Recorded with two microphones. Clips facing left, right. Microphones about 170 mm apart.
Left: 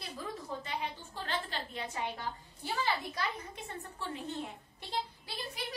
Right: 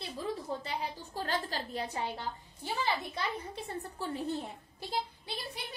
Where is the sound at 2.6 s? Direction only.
25° right (ahead or behind).